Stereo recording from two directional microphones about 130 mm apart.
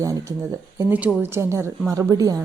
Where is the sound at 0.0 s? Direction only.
25° right (ahead or behind).